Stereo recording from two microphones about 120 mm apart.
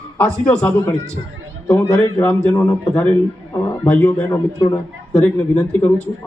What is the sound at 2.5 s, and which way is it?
Speech, 30° left (ahead or behind).